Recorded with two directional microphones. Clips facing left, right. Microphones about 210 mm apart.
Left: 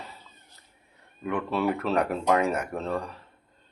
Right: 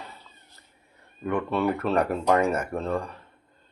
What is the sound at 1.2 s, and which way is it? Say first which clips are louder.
Speech: right 2 dB; centre (ahead or behind).